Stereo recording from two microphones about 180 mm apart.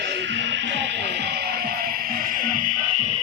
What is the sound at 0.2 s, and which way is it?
Music, 80° right.